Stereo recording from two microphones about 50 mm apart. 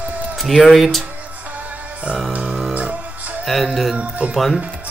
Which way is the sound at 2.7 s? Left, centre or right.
Right.